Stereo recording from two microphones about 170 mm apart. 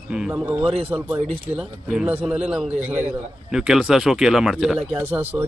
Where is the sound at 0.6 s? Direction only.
35° right (ahead or behind).